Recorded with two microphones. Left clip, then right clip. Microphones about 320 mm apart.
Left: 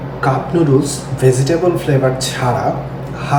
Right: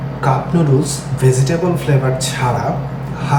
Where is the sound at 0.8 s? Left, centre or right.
Centre.